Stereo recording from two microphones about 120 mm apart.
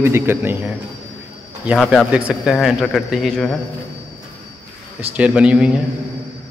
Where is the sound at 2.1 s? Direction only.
10° right (ahead or behind).